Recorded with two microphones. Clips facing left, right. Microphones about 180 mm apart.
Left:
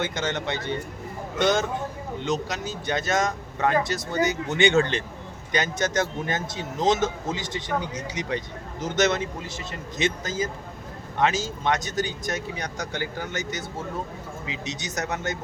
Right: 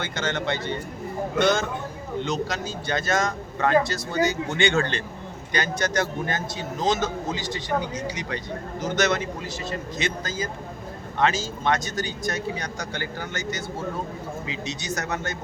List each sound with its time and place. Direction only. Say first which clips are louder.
0.0 s speech: even; 20° left (ahead or behind)
2.2 s speech: left 1 dB; 20° left (ahead or behind)